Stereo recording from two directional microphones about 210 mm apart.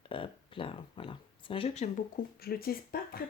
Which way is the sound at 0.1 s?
25° left (ahead or behind).